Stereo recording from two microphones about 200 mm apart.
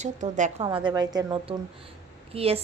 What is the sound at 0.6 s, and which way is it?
A woman's voice, 25° right (ahead or behind).